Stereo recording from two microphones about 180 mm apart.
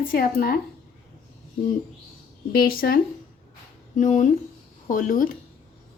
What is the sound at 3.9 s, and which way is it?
A woman's voice, 45° left (ahead or behind).